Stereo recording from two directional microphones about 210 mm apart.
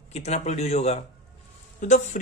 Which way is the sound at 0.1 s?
30° left (ahead or behind).